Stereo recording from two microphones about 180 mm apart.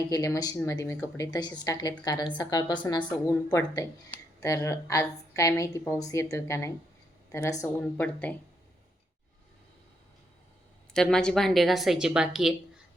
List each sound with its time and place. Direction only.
0.1 s a woman's voice: 20° left (ahead or behind)
10.9 s a woman's voice: 5° left (ahead or behind)